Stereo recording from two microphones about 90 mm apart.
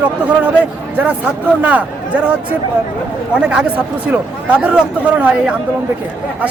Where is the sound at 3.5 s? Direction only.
15° right (ahead or behind).